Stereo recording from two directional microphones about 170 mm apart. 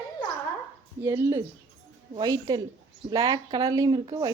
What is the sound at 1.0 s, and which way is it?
Speech, 15° right (ahead or behind).